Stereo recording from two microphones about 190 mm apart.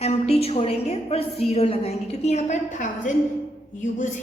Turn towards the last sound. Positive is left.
turn(degrees=40)  # may be behind; listen again after turning